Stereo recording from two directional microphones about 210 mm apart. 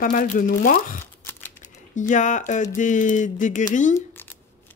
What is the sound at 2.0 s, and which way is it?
Speech, 35° left (ahead or behind).